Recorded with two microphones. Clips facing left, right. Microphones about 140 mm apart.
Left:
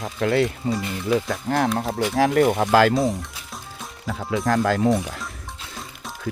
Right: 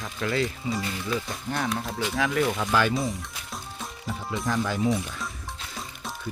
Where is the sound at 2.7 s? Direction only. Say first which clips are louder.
Left 8 dB; 90° left.